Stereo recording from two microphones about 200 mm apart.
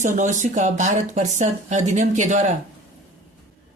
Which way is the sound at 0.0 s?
35° right (ahead or behind).